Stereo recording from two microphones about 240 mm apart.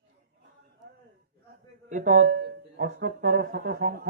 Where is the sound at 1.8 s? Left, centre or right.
Right.